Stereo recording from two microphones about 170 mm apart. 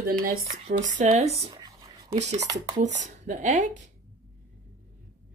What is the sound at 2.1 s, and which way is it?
Speech, 40° right (ahead or behind).